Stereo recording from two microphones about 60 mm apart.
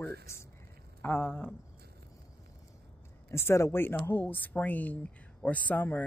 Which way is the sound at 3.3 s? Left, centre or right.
Left.